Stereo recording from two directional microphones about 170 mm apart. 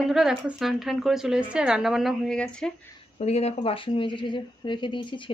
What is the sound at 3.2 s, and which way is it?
Speech, 40° left (ahead or behind).